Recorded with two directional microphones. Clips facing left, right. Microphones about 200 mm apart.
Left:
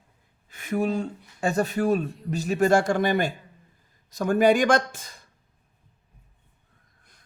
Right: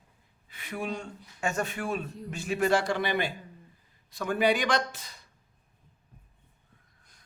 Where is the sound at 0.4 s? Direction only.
45° left (ahead or behind).